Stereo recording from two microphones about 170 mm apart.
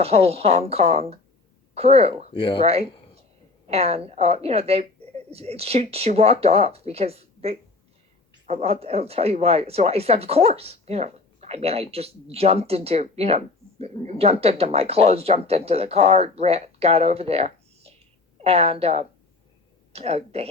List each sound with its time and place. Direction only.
0.0 s speech: 35° right (ahead or behind)
2.3 s speech: 30° left (ahead or behind)
3.7 s speech: 35° right (ahead or behind)